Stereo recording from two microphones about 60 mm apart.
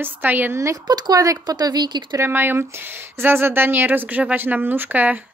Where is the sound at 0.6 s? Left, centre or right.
Right.